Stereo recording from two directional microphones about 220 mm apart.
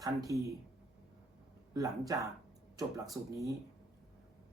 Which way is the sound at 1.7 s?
15° right (ahead or behind).